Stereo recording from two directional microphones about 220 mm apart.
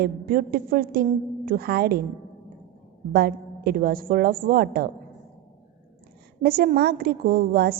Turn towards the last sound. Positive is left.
turn(degrees=-45)  # may be behind; listen again after turning